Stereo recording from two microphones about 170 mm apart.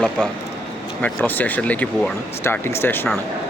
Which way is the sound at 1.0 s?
10° left (ahead or behind).